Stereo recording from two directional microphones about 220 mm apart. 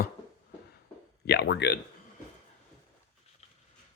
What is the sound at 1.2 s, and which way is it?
Speech, 50° left (ahead or behind).